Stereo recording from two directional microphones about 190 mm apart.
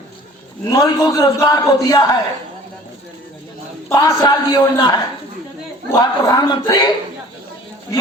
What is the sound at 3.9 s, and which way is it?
A man's voice, 20° left (ahead or behind).